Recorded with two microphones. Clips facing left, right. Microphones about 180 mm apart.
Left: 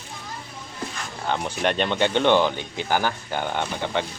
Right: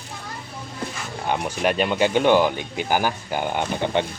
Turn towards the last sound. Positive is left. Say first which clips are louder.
# right 3 dB
turn(degrees=-15)  # may be behind; listen again after turning